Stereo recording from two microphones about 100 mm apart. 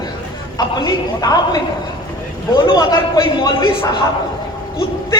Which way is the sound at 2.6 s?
45° left (ahead or behind).